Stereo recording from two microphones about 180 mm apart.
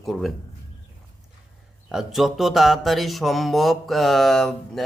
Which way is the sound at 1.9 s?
Centre (ahead or behind).